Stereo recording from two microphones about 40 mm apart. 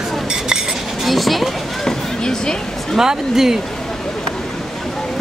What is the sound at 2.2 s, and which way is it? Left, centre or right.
Speech, centre.